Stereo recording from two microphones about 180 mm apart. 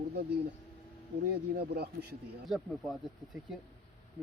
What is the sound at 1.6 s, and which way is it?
Speech, 60° right (ahead or behind).